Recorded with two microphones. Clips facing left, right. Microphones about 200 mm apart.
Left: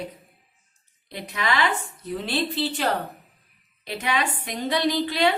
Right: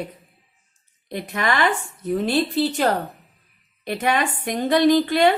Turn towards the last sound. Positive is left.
turn(degrees=-50)  # may be behind; listen again after turning